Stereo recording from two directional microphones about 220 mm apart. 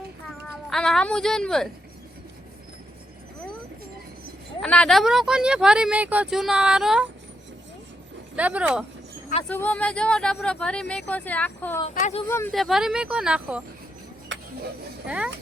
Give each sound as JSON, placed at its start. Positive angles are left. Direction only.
{"t": 0.3, "sound": "speech", "side_deg": 5}
{"t": 4.6, "sound": "speech", "side_deg": 5}
{"t": 8.4, "sound": "speech", "side_deg": -5}
{"t": 9.4, "sound": "speech", "side_deg": 10}
{"t": 11.9, "sound": "speech", "side_deg": 30}
{"t": 12.3, "sound": "speech", "side_deg": 10}
{"t": 12.5, "sound": "speech", "side_deg": 0}
{"t": 14.3, "sound": "music", "side_deg": -55}
{"t": 15.0, "sound": "speech", "side_deg": -5}